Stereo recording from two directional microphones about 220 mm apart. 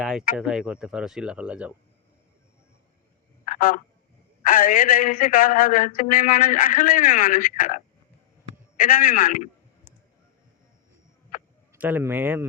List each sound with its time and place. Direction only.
0.0 s speech: centre (ahead or behind)
3.4 s a sound: 35° left (ahead or behind)
4.4 s speech: 40° left (ahead or behind)
11.7 s speech: 10° right (ahead or behind)